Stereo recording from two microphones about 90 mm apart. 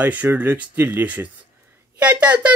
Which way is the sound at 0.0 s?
20° right (ahead or behind).